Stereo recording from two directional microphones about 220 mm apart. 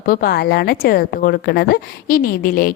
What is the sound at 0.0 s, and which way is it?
A woman's voice, 40° left (ahead or behind).